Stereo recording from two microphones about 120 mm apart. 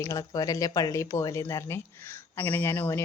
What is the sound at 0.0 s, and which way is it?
Speech, 30° left (ahead or behind).